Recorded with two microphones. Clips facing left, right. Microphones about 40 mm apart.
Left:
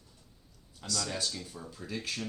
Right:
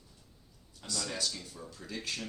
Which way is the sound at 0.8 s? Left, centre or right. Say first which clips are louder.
Left 2 dB; centre.